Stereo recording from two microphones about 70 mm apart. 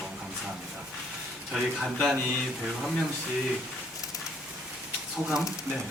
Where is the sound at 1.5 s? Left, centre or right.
Centre.